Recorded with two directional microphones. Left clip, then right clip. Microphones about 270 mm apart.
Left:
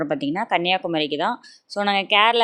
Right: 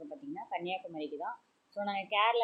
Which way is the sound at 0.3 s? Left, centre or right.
Left.